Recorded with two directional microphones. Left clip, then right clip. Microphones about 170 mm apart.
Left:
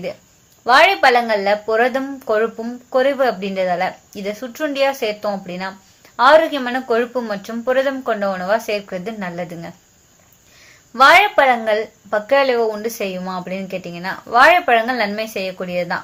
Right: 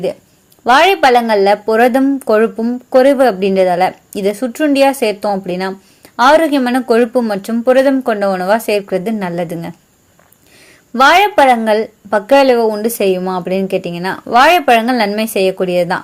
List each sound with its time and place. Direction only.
0.6 s speech: 45° right (ahead or behind)
10.9 s speech: 45° right (ahead or behind)